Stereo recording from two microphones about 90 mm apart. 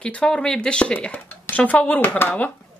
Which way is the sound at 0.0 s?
10° left (ahead or behind).